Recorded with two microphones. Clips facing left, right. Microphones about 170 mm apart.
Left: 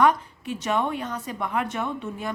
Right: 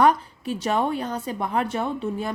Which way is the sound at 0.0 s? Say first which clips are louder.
Right 2 dB; 35° right (ahead or behind).